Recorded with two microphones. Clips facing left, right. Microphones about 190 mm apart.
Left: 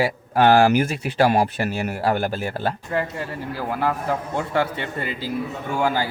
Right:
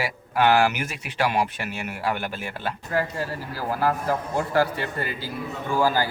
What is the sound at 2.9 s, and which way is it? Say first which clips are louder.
Speech: left 1 dB; 20° left (ahead or behind).